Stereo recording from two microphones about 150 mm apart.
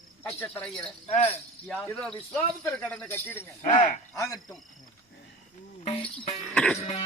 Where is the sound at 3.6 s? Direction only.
35° left (ahead or behind).